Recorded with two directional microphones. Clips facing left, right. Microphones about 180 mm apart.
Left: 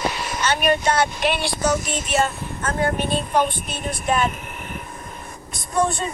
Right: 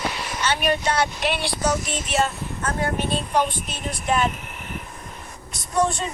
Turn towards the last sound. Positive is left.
turn(degrees=55)  # may be behind; listen again after turning